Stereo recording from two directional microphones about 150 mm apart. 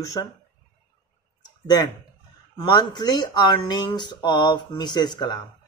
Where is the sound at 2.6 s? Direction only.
30° left (ahead or behind).